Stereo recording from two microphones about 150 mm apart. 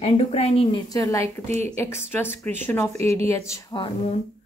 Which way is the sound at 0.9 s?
20° left (ahead or behind).